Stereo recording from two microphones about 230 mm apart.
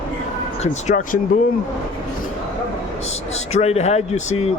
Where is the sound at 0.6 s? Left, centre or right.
Left.